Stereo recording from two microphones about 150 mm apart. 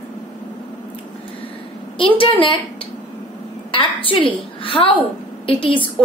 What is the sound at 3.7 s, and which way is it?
A woman's voice, 35° left (ahead or behind).